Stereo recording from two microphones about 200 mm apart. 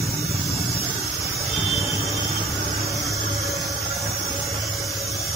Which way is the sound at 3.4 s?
Centre (ahead or behind).